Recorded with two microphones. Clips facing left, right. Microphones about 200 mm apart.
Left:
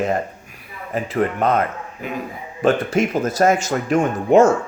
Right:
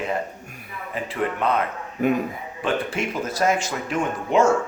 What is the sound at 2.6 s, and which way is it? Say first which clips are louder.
Speech: left 7 dB; 40° left (ahead or behind).